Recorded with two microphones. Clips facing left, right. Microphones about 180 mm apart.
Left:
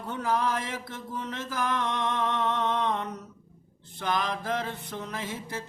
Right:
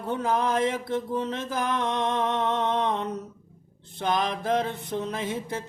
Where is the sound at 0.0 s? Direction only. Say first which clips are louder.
Right 3 dB; 25° right (ahead or behind).